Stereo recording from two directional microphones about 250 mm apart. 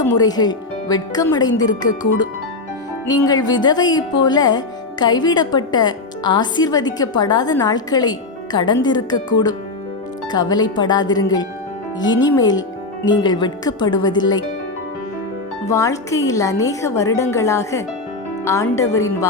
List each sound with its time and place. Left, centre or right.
0.0 s a woman's voice: centre
12.2 s a woman's voice: centre
15.6 s a woman's voice: centre